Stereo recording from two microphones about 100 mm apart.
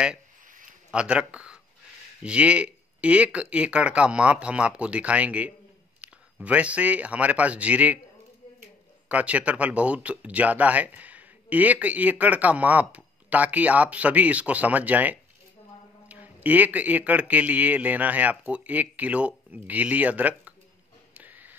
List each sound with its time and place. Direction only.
0.9 s speech: 10° right (ahead or behind)
9.1 s speech: 15° right (ahead or behind)
21.1 s a sound: 15° right (ahead or behind)